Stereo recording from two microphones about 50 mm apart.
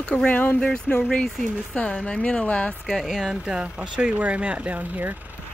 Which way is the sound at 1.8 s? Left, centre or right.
Left.